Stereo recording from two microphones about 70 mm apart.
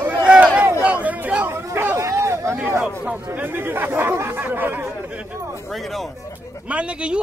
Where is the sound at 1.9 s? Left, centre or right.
Right.